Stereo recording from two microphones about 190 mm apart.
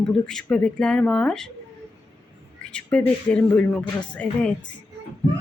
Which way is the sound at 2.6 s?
5° left (ahead or behind).